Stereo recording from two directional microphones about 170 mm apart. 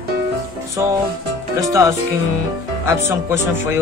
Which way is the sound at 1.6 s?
20° right (ahead or behind).